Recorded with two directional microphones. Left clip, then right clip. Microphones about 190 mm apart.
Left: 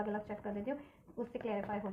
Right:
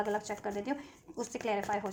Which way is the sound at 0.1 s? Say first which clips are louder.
Right 6 dB; 35° right (ahead or behind).